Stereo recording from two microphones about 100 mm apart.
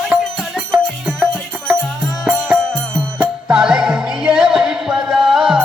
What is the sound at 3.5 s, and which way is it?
Music, 5° right (ahead or behind).